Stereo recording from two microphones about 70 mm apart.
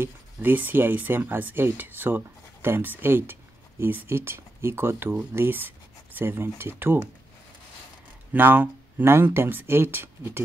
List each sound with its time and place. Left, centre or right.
0.0 s speech: right
8.3 s speech: right